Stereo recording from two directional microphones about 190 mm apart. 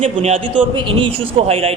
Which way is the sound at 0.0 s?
30° right (ahead or behind).